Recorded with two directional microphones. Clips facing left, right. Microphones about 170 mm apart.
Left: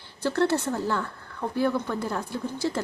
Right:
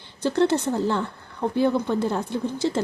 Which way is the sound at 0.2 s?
20° right (ahead or behind).